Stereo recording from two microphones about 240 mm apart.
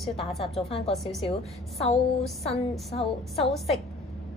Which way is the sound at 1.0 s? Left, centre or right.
Centre.